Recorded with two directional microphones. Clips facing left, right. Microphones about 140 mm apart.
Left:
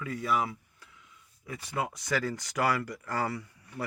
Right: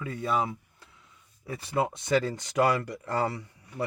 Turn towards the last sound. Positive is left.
turn(degrees=-25)  # may be behind; listen again after turning